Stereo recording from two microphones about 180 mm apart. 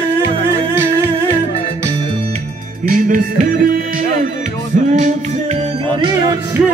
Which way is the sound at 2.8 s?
45° right (ahead or behind).